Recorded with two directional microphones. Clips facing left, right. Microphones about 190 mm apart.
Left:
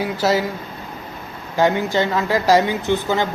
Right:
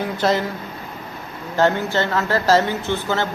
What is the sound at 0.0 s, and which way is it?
Speech, 10° left (ahead or behind).